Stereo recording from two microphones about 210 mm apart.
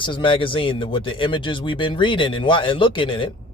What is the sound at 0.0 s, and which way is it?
A man's voice, 25° left (ahead or behind).